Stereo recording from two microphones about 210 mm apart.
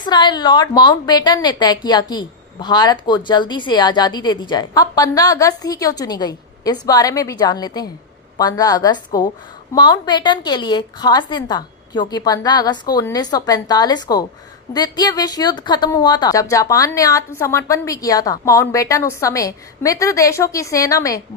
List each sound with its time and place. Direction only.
0.0 s a woman's voice: 20° left (ahead or behind)